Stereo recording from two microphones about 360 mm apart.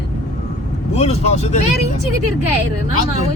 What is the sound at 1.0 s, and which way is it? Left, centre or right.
Speech, centre.